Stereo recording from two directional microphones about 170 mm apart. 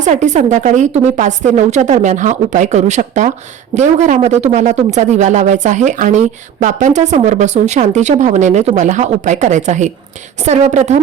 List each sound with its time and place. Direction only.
0.0 s a woman's voice: 45° right (ahead or behind)